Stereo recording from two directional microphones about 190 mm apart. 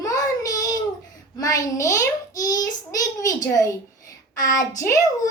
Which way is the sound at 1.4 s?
15° left (ahead or behind).